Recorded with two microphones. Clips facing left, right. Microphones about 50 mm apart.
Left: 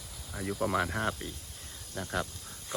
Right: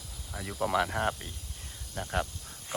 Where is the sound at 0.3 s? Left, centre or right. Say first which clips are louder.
Left 1 dB; centre.